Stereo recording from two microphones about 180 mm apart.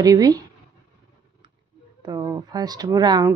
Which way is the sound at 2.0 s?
20° right (ahead or behind).